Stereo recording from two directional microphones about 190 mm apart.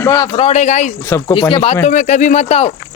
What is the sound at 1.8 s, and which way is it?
Speech, 40° left (ahead or behind).